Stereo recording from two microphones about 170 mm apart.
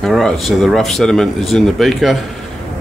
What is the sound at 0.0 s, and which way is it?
Speech, centre (ahead or behind).